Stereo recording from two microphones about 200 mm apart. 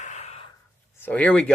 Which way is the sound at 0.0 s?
35° left (ahead or behind).